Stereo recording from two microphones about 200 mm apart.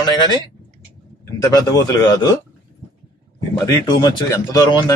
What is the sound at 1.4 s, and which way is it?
Speech, 20° left (ahead or behind).